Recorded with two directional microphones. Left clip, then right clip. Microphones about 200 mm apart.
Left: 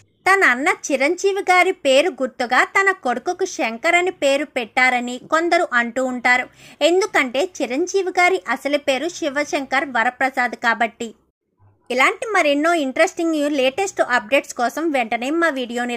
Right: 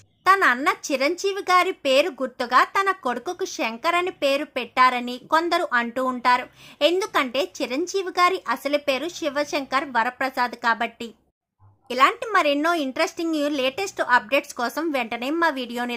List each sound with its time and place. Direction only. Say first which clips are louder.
0.3 s speech: left 3 dB; 5° left (ahead or behind)